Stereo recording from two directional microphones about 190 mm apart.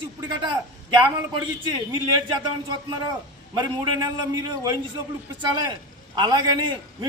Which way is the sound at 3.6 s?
20° right (ahead or behind).